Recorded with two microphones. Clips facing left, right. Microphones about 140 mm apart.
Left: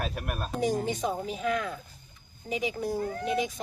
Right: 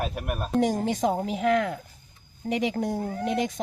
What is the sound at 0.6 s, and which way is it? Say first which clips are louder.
A woman's voice: right 4 dB; 85° right.